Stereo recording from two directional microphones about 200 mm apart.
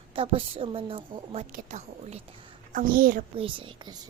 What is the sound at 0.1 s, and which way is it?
A woman's voice, 25° right (ahead or behind).